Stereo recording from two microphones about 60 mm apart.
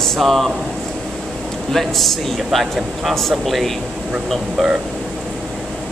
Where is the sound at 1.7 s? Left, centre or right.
Centre.